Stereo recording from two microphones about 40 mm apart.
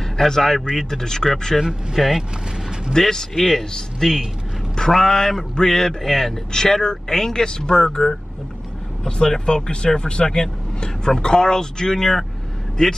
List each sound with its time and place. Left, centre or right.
0.2 s a man's voice: centre
1.6 s speech: centre
2.9 s a man's voice: centre